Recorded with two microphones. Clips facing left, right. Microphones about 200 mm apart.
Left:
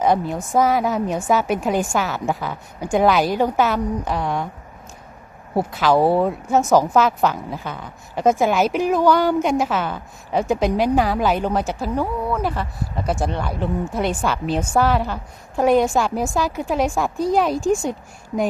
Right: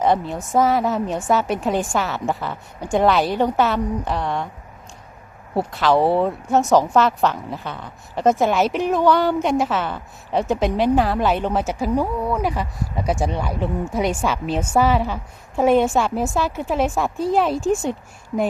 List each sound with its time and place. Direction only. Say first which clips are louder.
0.0 s a woman's voice: left 1 dB; centre (ahead or behind)
5.5 s a woman's voice: left 1 dB; centre (ahead or behind)